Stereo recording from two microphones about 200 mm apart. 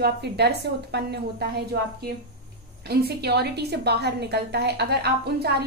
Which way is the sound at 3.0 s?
55° right (ahead or behind).